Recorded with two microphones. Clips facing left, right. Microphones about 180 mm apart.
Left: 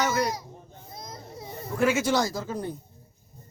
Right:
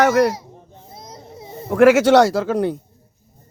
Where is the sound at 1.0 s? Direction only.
20° right (ahead or behind).